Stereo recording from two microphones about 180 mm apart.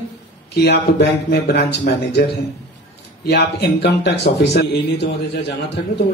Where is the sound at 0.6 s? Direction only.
65° left (ahead or behind).